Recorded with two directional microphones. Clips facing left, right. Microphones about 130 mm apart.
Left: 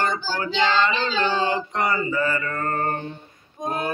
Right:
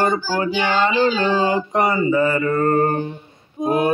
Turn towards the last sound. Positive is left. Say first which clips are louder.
# right 8 dB
turn(degrees=-15)  # may be behind; listen again after turning